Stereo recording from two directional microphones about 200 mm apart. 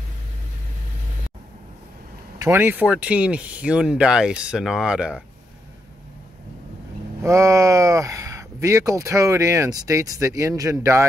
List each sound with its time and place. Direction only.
2.3 s speech: 15° right (ahead or behind)
7.2 s speech: 15° right (ahead or behind)